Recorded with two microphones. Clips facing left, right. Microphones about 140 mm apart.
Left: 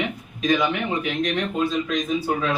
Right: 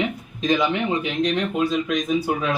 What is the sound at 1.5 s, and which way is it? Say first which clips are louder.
Speech: right 1 dB; 10° right (ahead or behind).